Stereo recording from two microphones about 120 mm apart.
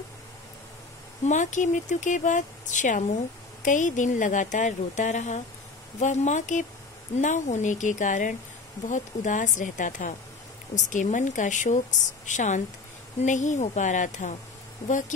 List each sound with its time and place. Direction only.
1.2 s speech: 90° left